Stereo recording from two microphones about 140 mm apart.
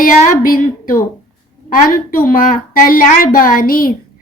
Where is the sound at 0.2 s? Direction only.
70° left (ahead or behind).